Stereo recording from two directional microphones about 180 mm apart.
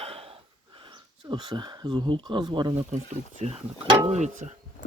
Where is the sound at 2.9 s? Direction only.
40° right (ahead or behind).